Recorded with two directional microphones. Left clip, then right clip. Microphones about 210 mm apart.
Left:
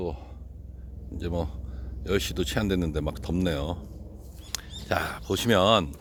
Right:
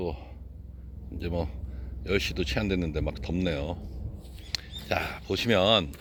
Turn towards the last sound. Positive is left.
turn(degrees=15)  # may be behind; listen again after turning